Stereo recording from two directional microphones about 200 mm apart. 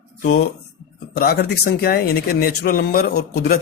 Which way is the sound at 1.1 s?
50° left (ahead or behind).